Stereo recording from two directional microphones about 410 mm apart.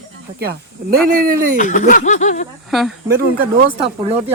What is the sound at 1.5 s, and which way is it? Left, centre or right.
Speech, centre.